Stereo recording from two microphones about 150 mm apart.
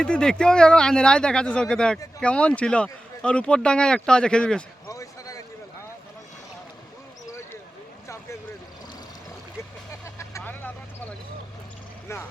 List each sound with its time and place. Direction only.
0.0 s speech: 5° left (ahead or behind)
4.9 s basketball bounce: 25° left (ahead or behind)
8.0 s boat: 20° left (ahead or behind)
9.9 s vehicle: 20° left (ahead or behind)